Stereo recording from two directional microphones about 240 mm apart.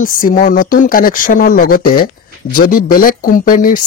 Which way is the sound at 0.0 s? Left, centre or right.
Left.